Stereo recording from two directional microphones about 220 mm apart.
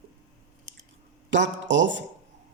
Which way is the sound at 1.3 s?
55° right (ahead or behind).